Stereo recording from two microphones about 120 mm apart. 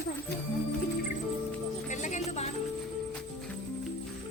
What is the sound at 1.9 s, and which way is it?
Music, 90° left.